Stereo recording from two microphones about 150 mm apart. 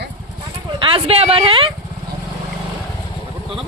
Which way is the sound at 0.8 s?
35° right (ahead or behind).